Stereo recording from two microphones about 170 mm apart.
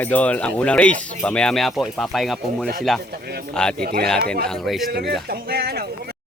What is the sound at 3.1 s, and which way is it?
Speech, 65° right (ahead or behind).